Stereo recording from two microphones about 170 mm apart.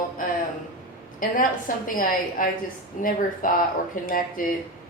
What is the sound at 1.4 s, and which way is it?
A woman's voice, 55° left (ahead or behind).